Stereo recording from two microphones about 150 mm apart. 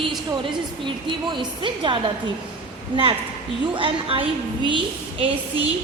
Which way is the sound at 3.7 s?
35° right (ahead or behind).